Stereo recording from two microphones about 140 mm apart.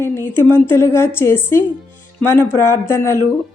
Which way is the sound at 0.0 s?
15° left (ahead or behind).